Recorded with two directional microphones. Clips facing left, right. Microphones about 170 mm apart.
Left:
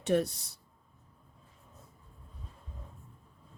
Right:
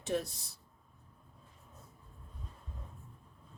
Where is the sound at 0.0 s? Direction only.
65° left (ahead or behind).